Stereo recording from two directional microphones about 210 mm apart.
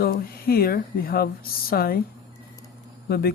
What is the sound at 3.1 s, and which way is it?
Speech, 50° left (ahead or behind).